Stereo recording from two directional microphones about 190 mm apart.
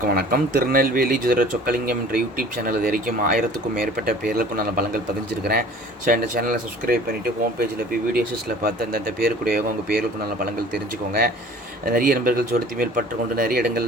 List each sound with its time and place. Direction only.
0.0 s speech: 50° right (ahead or behind)
8.6 s speech: 55° right (ahead or behind)
11.9 s speech: 50° right (ahead or behind)